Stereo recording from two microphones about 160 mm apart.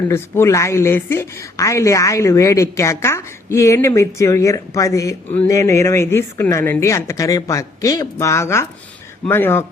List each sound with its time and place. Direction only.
0.1 s a woman's voice: 15° left (ahead or behind)